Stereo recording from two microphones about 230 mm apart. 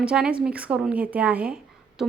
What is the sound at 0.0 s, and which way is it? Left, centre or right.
Speech, centre.